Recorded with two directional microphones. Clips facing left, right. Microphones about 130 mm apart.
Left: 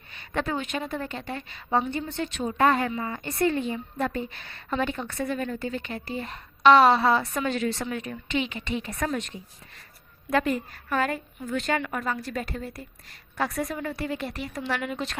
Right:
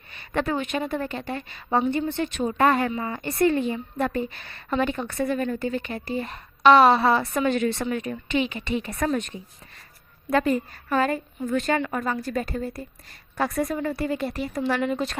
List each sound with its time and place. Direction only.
0.2 s a woman's voice: 50° right (ahead or behind)
2.9 s speech: 35° right (ahead or behind)
3.4 s a woman's voice: 50° right (ahead or behind)
10.2 s a woman's voice: 35° right (ahead or behind)